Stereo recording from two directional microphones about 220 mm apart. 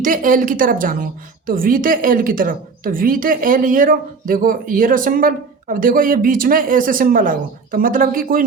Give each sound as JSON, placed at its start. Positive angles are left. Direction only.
{"t": 0.0, "sound": "a woman's voice", "side_deg": -40}